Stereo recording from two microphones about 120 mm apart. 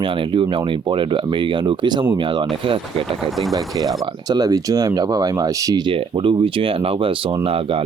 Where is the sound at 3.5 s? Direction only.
30° right (ahead or behind).